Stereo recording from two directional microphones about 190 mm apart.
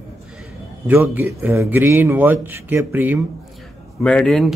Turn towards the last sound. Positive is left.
turn(degrees=0)  # may be behind; listen again after turning